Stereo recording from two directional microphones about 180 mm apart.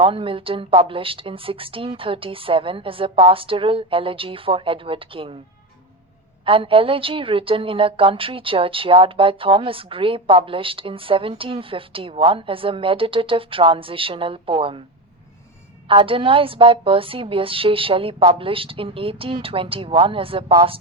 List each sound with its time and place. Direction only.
0.0 s a woman's voice: 30° right (ahead or behind)
6.4 s a woman's voice: 30° right (ahead or behind)
15.9 s a woman's voice: 30° right (ahead or behind)